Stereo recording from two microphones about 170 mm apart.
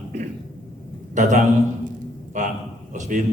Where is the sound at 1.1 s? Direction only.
45° right (ahead or behind).